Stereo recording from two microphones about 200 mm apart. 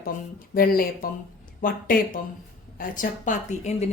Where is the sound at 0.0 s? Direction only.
45° left (ahead or behind).